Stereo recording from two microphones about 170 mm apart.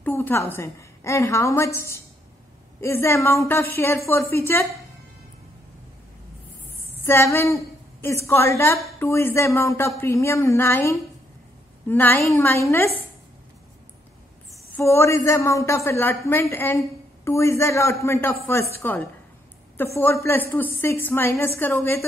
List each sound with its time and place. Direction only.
0.0 s a woman's voice: 10° left (ahead or behind)
7.1 s a woman's voice: 15° left (ahead or behind)
14.7 s a woman's voice: 15° left (ahead or behind)